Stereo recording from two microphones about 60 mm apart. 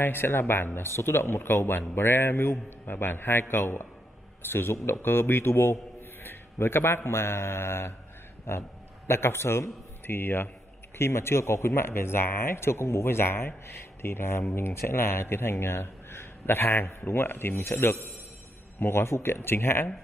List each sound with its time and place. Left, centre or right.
0.0 s a man's voice: left